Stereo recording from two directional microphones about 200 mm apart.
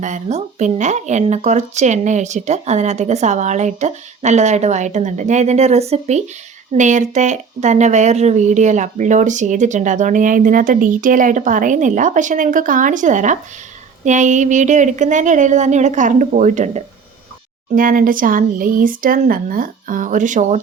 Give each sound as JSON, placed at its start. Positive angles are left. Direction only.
{"t": 0.0, "sound": "speech", "side_deg": -35}